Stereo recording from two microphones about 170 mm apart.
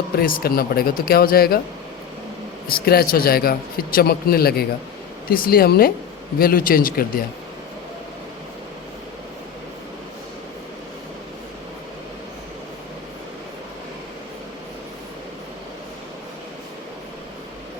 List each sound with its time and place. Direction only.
0.2 s speech: 60° left (ahead or behind)
2.6 s speech: 65° left (ahead or behind)